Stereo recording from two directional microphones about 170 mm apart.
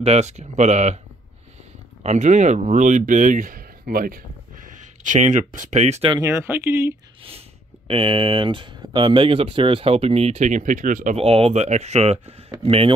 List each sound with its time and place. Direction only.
0.0 s speech: 40° right (ahead or behind)
2.0 s speech: 40° right (ahead or behind)
6.2 s speech: 15° right (ahead or behind)
7.9 s speech: 30° right (ahead or behind); by 11.2 s 45° right (ahead or behind)
11.2 s speech: 35° right (ahead or behind)